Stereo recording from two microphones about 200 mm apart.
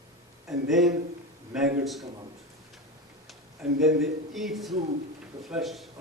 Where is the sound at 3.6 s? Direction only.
5° right (ahead or behind).